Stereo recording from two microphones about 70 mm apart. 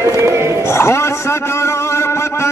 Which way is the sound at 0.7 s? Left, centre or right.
Left.